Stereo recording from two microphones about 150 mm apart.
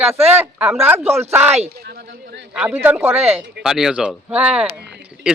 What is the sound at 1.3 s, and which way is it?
Speech, 15° right (ahead or behind).